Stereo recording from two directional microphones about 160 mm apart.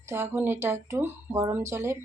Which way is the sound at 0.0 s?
15° right (ahead or behind).